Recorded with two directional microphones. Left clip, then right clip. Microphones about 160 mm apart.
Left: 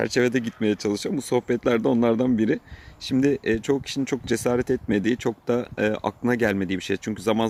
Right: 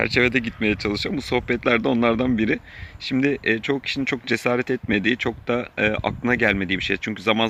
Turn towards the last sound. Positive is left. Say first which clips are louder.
# right 3 dB
turn(degrees=25)  # may be behind; listen again after turning